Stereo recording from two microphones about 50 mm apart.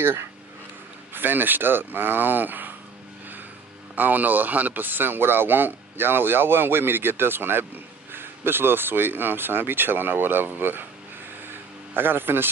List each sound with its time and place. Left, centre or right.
1.1 s speech: right
3.9 s speech: right
11.9 s speech: right